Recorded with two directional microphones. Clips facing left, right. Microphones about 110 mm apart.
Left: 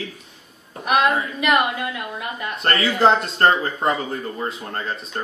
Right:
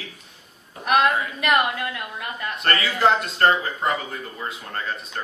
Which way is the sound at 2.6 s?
30° left (ahead or behind).